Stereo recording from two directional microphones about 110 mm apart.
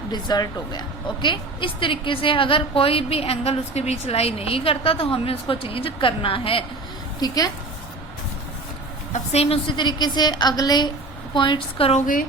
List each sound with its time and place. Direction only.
0.1 s a woman's voice: 40° left (ahead or behind); by 6.7 s 55° left (ahead or behind)
7.2 s a woman's voice: 35° left (ahead or behind)
9.1 s a woman's voice: 70° left (ahead or behind)
9.7 s a woman's voice: 40° left (ahead or behind)